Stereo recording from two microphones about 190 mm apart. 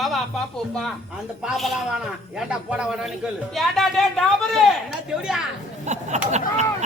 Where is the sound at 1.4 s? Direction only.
Centre (ahead or behind).